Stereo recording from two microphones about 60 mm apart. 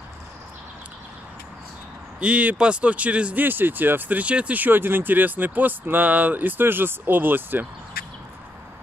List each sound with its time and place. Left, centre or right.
2.1 s speech: right
3.4 s speech: right